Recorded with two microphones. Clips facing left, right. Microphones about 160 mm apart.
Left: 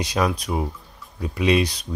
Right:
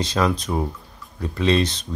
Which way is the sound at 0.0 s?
15° left (ahead or behind).